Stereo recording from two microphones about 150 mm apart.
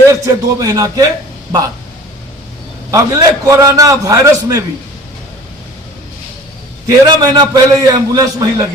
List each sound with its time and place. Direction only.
0.1 s a man's voice: 20° right (ahead or behind)
2.9 s a man's voice: 20° right (ahead or behind)
6.8 s a man's voice: 25° right (ahead or behind)